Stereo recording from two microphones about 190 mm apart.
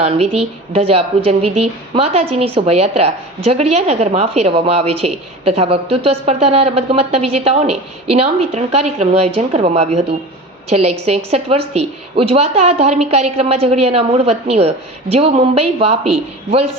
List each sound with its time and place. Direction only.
0.0 s a woman's voice: 30° right (ahead or behind)